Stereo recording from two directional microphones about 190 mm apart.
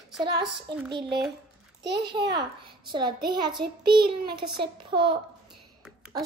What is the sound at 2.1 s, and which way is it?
A child's voice, 25° right (ahead or behind).